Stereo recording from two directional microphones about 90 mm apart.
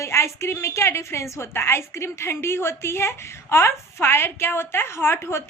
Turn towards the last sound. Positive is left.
turn(degrees=30)  # may be behind; listen again after turning